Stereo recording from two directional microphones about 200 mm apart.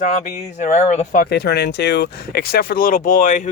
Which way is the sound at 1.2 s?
55° left (ahead or behind).